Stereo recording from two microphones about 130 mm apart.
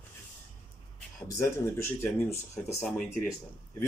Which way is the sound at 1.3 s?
20° left (ahead or behind).